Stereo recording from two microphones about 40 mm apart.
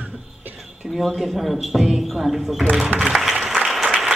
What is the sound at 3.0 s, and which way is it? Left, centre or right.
Music, centre.